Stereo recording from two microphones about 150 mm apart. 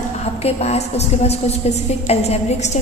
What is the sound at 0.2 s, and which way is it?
A woman's voice, 45° left (ahead or behind).